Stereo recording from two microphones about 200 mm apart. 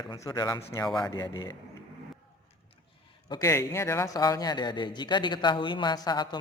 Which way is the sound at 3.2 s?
20° left (ahead or behind).